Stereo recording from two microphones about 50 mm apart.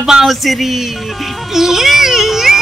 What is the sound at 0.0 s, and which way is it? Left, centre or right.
Speech, centre.